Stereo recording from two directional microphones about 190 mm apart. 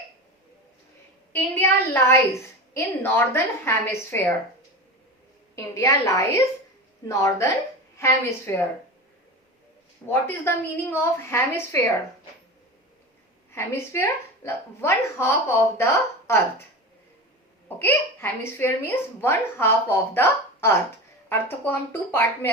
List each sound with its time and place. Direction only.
1.3 s speech: 10° left (ahead or behind)
5.5 s speech: 15° left (ahead or behind)
10.1 s speech: 10° left (ahead or behind)
13.5 s speech: 15° left (ahead or behind)
17.7 s speech: 10° left (ahead or behind)